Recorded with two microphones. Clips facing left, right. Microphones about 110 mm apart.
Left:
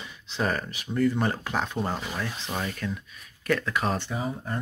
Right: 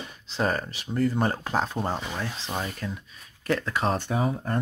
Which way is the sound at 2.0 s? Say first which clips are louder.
Even; 20° right (ahead or behind).